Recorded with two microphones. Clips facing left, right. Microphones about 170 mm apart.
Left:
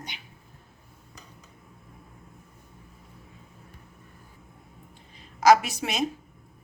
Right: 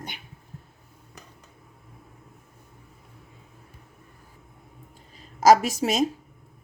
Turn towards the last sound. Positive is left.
turn(degrees=-40)  # may be behind; listen again after turning